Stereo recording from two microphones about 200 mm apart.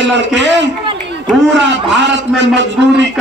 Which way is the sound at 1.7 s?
60° right (ahead or behind).